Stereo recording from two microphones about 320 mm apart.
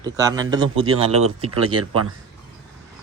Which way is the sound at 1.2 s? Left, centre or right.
Right.